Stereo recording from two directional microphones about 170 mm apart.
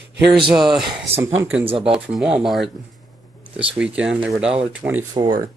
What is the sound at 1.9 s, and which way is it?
Speech, 5° right (ahead or behind).